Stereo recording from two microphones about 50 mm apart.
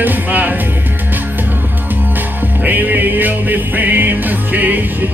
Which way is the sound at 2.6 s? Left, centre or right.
Right.